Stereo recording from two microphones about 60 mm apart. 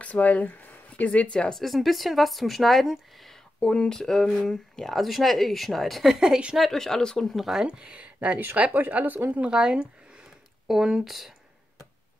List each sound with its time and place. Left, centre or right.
0.0 s speech: left
1.5 s speech: centre
3.5 s speech: centre
6.6 s speech: centre
7.3 s speech: centre
7.6 s speech: centre
9.5 s speech: centre